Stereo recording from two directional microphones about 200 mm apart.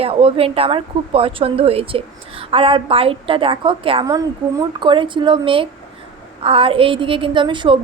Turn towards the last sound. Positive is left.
turn(degrees=-25)  # may be behind; listen again after turning